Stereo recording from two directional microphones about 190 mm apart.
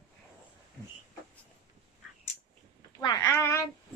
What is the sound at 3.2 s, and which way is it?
Child singing, 15° left (ahead or behind).